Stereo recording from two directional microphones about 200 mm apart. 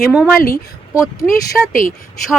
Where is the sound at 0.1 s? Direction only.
5° right (ahead or behind).